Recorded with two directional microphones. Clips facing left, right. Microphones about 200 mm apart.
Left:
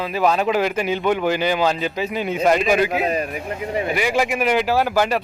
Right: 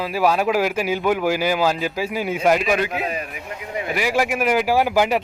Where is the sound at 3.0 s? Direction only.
35° left (ahead or behind).